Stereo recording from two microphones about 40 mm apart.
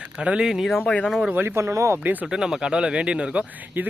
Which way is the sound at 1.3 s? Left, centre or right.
Right.